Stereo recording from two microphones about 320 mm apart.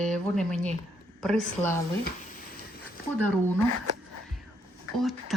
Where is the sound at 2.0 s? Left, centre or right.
Left.